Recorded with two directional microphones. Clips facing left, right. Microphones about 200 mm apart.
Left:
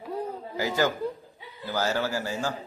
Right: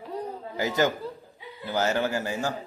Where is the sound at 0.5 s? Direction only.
20° right (ahead or behind).